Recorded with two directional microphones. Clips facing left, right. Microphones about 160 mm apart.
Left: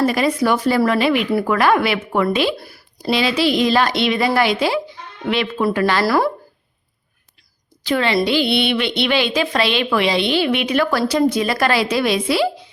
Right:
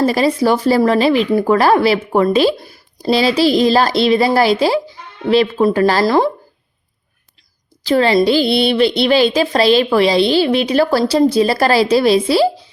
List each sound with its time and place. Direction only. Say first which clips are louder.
0.0 s speech: right 3 dB; 30° right (ahead or behind)
2.6 s speech: right 1 dB; 20° right (ahead or behind)
3.0 s speech: right 4 dB; 35° right (ahead or behind)
6.1 s speech: right 3 dB; 20° right (ahead or behind)
7.9 s speech: right 5 dB; 35° right (ahead or behind)